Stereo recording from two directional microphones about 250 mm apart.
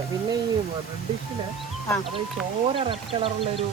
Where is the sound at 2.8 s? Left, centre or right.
Right.